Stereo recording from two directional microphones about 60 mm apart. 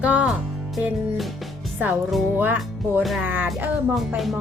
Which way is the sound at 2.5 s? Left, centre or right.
Centre.